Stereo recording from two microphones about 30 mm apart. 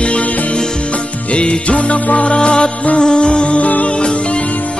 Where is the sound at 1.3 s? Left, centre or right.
Left.